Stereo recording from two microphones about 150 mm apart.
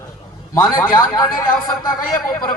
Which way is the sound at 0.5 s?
25° left (ahead or behind).